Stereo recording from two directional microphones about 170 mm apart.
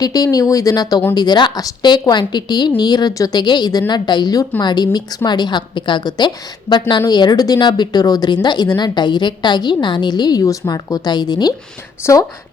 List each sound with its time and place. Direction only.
0.0 s speech: 20° left (ahead or behind)